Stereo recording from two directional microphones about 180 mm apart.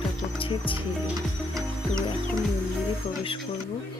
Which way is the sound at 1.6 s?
20° right (ahead or behind).